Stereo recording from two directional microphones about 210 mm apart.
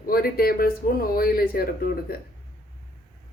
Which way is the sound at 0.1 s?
45° left (ahead or behind).